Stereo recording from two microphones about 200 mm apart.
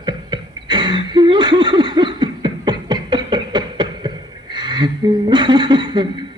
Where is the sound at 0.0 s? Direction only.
25° right (ahead or behind).